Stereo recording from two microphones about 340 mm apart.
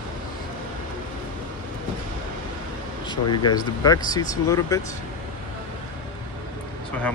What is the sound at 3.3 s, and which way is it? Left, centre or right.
Speech, centre.